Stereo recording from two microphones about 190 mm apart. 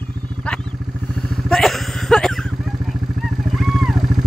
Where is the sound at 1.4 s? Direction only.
Centre (ahead or behind).